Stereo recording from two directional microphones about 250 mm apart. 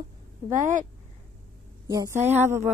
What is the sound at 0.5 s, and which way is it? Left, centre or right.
Speech, right.